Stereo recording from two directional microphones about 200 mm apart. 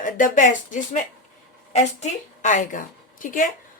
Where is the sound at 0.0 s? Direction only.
40° left (ahead or behind).